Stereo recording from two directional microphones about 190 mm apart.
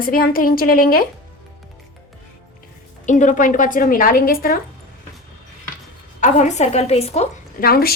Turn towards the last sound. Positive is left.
turn(degrees=50)  # may be behind; listen again after turning